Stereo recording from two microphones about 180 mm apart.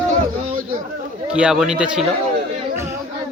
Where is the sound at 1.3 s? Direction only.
5° right (ahead or behind).